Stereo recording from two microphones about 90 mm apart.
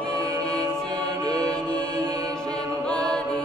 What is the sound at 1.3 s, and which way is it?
Mantra, 45° right (ahead or behind).